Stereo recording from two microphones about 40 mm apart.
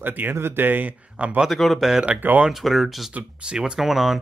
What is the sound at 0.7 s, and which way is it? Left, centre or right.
Speech, right.